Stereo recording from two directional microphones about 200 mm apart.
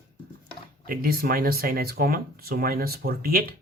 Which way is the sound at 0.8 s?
45° right (ahead or behind).